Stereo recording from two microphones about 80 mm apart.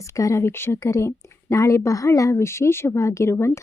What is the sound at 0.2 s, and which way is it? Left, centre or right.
A woman's voice, left.